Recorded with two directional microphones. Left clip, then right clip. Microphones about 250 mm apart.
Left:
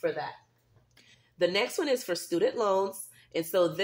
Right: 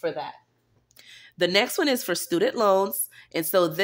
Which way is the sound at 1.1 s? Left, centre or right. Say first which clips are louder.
Right 4 dB; right.